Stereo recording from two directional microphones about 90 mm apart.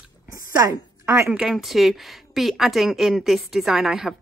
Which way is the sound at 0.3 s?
40° right (ahead or behind).